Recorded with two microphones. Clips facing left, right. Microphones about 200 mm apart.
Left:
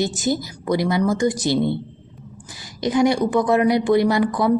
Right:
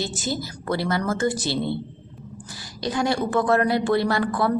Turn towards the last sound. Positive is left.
turn(degrees=15)  # may be behind; listen again after turning